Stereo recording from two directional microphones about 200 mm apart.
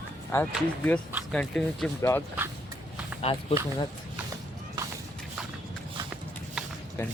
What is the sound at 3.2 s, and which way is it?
Speech, 30° left (ahead or behind).